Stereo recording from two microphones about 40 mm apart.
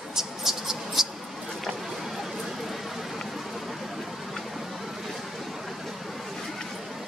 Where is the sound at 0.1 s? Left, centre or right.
Centre.